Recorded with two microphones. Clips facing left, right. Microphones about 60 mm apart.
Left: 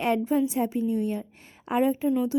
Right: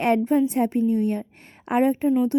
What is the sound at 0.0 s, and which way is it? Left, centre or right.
A woman's voice, right.